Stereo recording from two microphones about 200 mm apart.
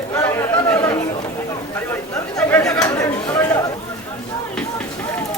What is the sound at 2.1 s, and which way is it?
Chatter, 10° left (ahead or behind).